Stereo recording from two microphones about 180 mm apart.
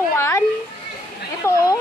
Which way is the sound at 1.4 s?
15° left (ahead or behind).